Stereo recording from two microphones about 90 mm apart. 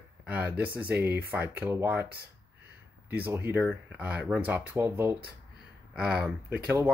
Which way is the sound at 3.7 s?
15° right (ahead or behind).